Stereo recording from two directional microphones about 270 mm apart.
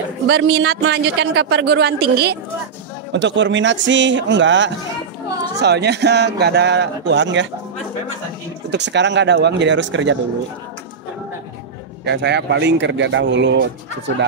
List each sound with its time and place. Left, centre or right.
0.3 s a man's voice: right
8.6 s a man's voice: right
12.0 s a man's voice: right